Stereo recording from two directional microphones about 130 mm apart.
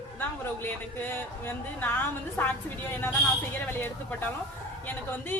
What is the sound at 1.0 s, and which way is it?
A woman's voice, 15° left (ahead or behind).